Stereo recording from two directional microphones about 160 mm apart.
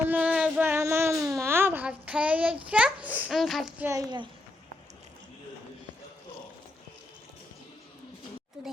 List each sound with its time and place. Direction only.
0.0 s music: 10° right (ahead or behind)
1.3 s a sound: 15° right (ahead or behind)
2.6 s a child's voice: 5° right (ahead or behind)
3.8 s a child's voice: 25° right (ahead or behind)
8.6 s speech: 5° right (ahead or behind)